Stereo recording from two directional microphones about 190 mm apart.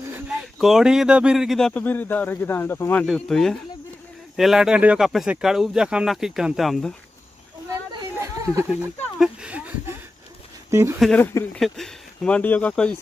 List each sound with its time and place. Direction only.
0.3 s speech: centre (ahead or behind)
7.9 s chatter: 20° right (ahead or behind)
9.2 s a sound: 5° right (ahead or behind)
10.7 s speech: 15° right (ahead or behind)
11.0 s speech: 5° left (ahead or behind)